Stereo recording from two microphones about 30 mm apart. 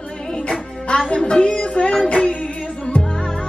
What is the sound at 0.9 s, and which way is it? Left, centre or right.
Music, left.